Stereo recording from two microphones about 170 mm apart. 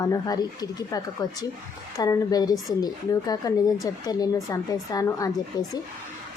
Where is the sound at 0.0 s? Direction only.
20° left (ahead or behind).